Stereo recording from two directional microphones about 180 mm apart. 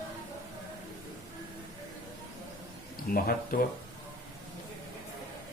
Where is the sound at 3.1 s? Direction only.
55° left (ahead or behind).